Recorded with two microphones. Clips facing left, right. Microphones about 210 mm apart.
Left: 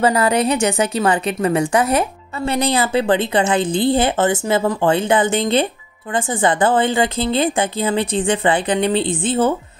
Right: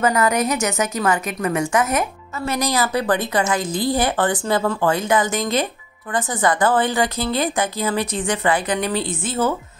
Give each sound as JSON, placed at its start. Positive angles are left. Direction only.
{"t": 0.0, "sound": "a woman's voice", "side_deg": 30}